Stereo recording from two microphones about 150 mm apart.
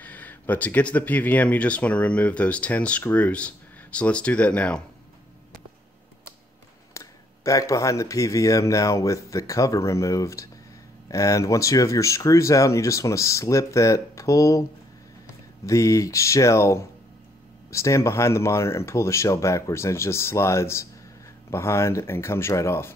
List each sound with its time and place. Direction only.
0.0 s speech: 10° left (ahead or behind)
6.9 s speech: 20° left (ahead or behind)